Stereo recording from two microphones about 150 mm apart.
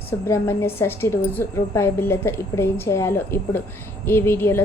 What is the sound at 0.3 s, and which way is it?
A woman's voice, 15° left (ahead or behind).